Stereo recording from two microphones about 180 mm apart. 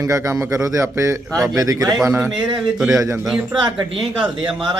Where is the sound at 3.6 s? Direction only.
25° right (ahead or behind).